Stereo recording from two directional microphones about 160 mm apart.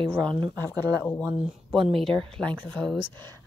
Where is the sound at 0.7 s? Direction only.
15° left (ahead or behind).